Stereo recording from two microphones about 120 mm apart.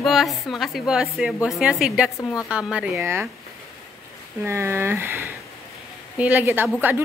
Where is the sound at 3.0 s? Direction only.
20° right (ahead or behind).